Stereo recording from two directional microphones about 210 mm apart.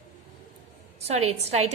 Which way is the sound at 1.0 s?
30° right (ahead or behind).